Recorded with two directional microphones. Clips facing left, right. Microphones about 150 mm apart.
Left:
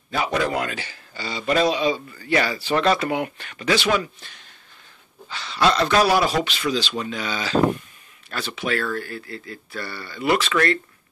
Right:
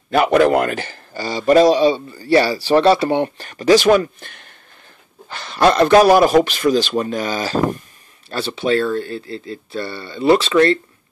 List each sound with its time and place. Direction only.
0.1 s a man's voice: 65° right (ahead or behind); by 7.8 s 40° right (ahead or behind)
8.3 s speech: 30° right (ahead or behind)